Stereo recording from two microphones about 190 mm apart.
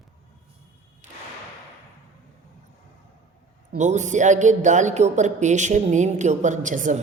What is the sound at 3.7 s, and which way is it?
Speech, 40° right (ahead or behind).